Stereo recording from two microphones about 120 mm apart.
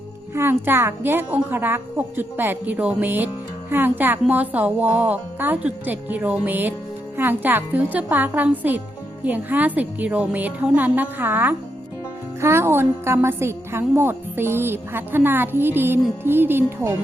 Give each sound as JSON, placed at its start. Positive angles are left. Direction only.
{"t": 0.3, "sound": "a woman's voice", "side_deg": -20}